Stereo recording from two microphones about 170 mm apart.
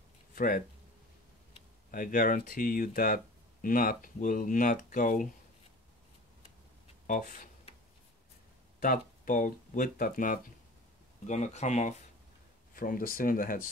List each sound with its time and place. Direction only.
0.4 s speech: 55° left (ahead or behind)
1.9 s speech: 55° left (ahead or behind)
7.1 s a sound: 50° left (ahead or behind)
8.7 s speech: 55° left (ahead or behind)
12.7 s speech: 55° left (ahead or behind)